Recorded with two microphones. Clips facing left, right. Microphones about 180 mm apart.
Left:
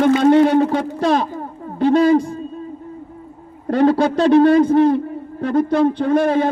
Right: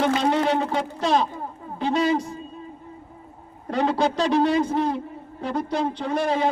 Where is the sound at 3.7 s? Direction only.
55° left (ahead or behind).